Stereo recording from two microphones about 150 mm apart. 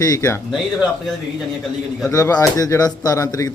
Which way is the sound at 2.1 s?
20° left (ahead or behind).